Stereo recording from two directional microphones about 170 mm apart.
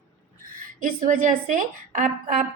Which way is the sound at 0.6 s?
55° right (ahead or behind).